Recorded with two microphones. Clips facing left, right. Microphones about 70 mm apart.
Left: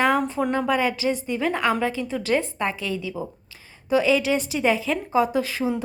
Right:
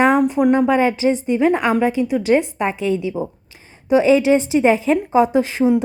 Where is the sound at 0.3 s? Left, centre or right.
Centre.